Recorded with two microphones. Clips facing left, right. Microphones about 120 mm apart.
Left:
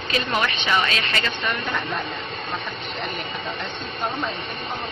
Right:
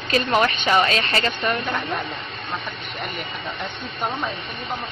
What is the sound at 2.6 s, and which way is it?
Speech, 25° left (ahead or behind).